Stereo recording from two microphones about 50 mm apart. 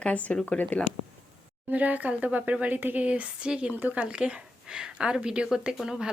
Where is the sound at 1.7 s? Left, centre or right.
Right.